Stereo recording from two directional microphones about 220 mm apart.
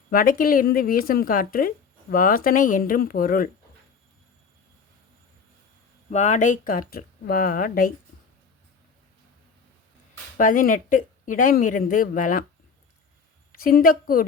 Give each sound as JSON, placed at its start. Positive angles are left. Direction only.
{"t": 0.1, "sound": "speech", "side_deg": 40}
{"t": 6.1, "sound": "speech", "side_deg": 30}
{"t": 10.3, "sound": "speech", "side_deg": 40}
{"t": 13.5, "sound": "a woman's voice", "side_deg": 40}